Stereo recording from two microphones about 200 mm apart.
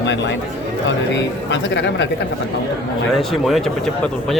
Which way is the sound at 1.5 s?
60° left (ahead or behind).